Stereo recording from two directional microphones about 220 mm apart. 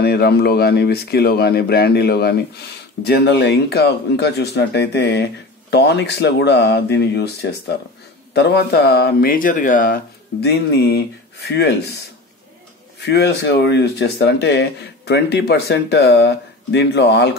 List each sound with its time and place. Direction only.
0.0 s speech: 45° left (ahead or behind)
13.0 s speech: 50° left (ahead or behind)